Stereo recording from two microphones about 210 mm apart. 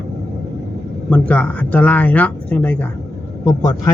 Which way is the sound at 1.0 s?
5° left (ahead or behind).